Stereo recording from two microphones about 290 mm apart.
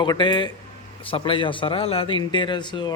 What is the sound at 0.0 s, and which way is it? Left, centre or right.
Speech, centre.